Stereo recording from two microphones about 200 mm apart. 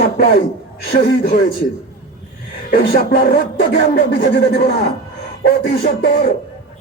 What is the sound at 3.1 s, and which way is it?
Speech, 45° left (ahead or behind).